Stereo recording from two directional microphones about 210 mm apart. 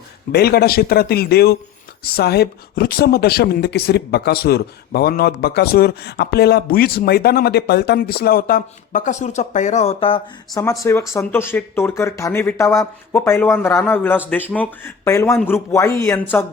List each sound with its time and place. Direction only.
0.3 s speech: 50° left (ahead or behind); by 10.6 s 25° left (ahead or behind)
10.6 s speech: 10° left (ahead or behind)